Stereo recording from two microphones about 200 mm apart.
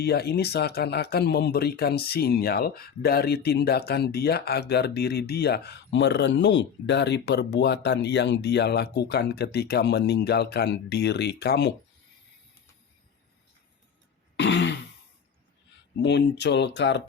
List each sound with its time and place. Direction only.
0.0 s speech: 50° left (ahead or behind)
14.3 s throat clearing: 60° left (ahead or behind)
16.0 s speech: 60° left (ahead or behind)